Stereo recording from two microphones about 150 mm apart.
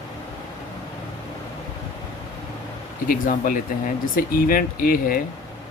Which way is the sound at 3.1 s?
65° left (ahead or behind).